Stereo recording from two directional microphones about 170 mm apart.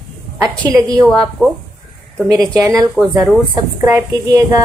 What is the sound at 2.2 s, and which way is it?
Speech, 20° right (ahead or behind).